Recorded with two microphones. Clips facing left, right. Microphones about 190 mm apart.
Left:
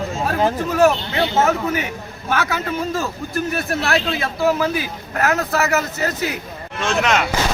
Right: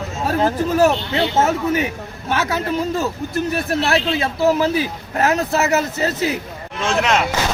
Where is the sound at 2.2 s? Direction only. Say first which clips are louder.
Right 1 dB; 20° right (ahead or behind).